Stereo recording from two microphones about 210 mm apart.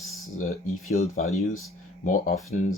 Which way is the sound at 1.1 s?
35° left (ahead or behind).